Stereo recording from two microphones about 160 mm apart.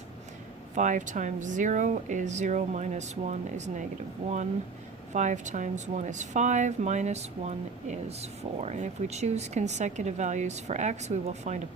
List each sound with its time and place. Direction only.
0.8 s a woman's voice: 50° right (ahead or behind)
5.1 s a woman's voice: 50° right (ahead or behind)